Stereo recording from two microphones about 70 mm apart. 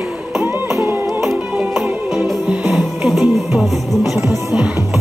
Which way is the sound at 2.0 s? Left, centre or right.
Centre.